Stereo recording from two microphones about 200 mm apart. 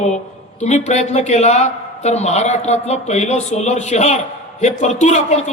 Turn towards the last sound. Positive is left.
turn(degrees=35)  # may be behind; listen again after turning